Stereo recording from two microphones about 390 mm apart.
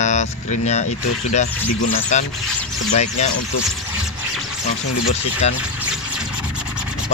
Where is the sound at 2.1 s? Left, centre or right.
Centre.